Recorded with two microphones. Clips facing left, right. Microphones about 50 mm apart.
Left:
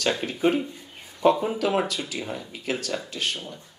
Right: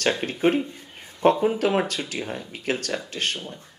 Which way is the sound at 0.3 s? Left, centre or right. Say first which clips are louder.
Right 1 dB; right.